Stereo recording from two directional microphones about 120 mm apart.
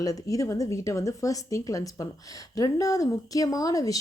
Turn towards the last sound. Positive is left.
turn(degrees=30)  # may be behind; listen again after turning